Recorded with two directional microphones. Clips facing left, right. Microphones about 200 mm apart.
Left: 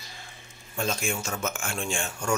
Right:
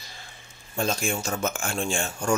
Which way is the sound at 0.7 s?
35° right (ahead or behind).